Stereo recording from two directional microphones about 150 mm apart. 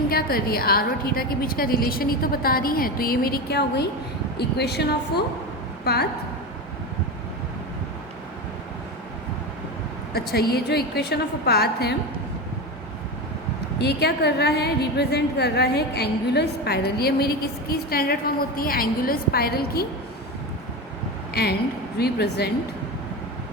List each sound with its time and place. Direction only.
0.1 s a woman's voice: 85° left
10.1 s a woman's voice: 90° left
13.7 s a woman's voice: 90° left
21.9 s a woman's voice: 90° left